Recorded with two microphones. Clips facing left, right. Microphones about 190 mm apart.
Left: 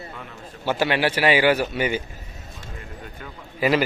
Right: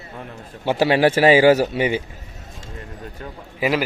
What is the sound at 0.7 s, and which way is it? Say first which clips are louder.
A man's voice: right 7 dB; 35° right (ahead or behind).